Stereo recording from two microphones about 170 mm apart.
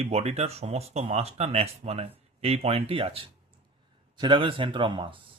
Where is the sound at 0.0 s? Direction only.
40° right (ahead or behind).